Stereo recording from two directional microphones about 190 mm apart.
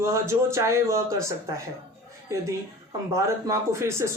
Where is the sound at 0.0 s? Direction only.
15° right (ahead or behind).